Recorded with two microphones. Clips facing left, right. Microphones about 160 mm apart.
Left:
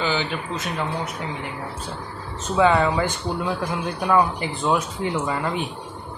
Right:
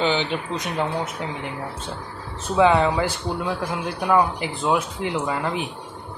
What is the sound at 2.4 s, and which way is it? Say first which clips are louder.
Speech: right 1 dB; 10° right (ahead or behind).